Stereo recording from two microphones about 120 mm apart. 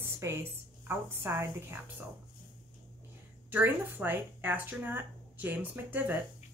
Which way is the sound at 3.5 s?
15° right (ahead or behind).